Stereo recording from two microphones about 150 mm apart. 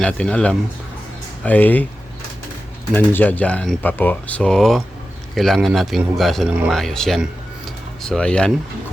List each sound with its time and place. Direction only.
0.0 s speech: 5° left (ahead or behind)
2.9 s speech: 15° left (ahead or behind)